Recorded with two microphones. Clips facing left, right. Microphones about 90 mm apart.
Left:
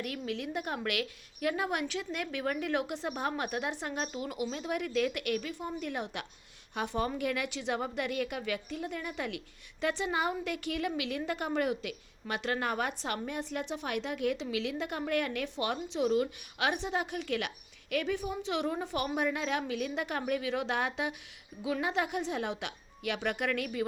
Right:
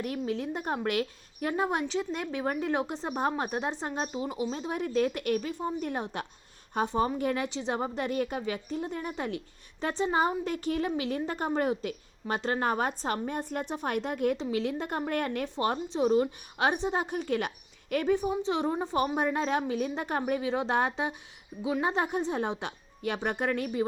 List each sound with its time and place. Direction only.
0.0 s a woman's voice: 30° right (ahead or behind)